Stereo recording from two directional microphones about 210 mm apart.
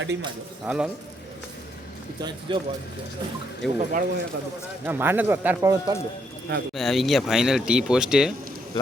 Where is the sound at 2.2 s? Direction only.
20° right (ahead or behind).